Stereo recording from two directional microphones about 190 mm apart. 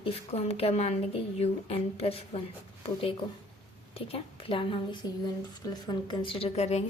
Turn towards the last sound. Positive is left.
turn(degrees=35)  # may be behind; listen again after turning